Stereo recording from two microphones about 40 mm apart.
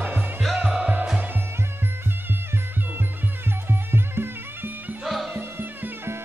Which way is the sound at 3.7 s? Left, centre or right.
Right.